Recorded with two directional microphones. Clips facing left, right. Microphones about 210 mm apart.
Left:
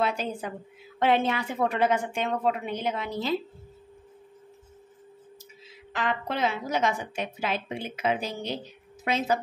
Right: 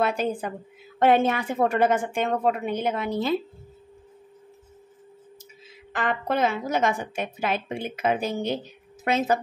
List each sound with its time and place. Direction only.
0.0 s a woman's voice: 50° right (ahead or behind)
5.9 s a woman's voice: 50° right (ahead or behind)